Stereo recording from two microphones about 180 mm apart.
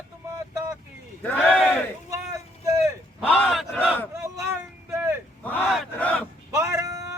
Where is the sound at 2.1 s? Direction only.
15° right (ahead or behind).